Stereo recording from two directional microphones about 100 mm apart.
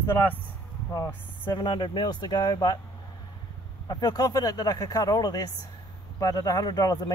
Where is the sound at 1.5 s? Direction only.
45° left (ahead or behind).